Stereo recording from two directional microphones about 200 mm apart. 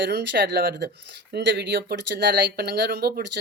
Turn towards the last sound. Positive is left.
turn(degrees=-55)  # may be behind; listen again after turning